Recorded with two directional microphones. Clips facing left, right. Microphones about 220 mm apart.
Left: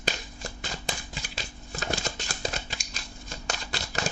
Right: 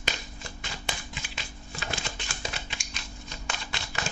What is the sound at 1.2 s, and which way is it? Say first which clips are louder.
Music: left 2 dB; 40° left (ahead or behind).